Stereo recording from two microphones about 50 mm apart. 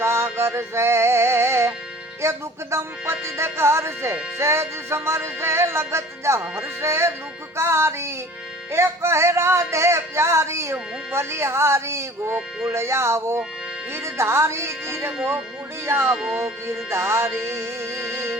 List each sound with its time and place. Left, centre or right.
0.0 s male singing: right
0.3 s music: right
16.0 s music: centre
16.6 s music: right